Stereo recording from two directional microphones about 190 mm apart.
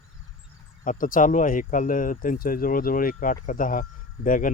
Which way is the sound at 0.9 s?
45° left (ahead or behind).